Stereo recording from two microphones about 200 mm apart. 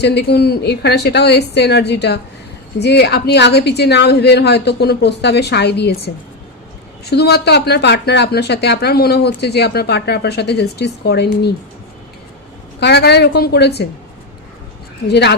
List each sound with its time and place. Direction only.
0.0 s speech: 55° left (ahead or behind)
12.8 s speech: 55° left (ahead or behind)
15.0 s speech: 55° left (ahead or behind)